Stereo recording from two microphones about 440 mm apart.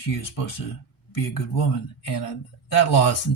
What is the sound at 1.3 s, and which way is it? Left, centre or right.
Speech, left.